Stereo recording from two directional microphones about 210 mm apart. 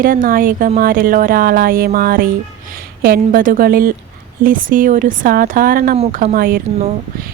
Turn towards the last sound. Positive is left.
turn(degrees=-40)  # may be behind; listen again after turning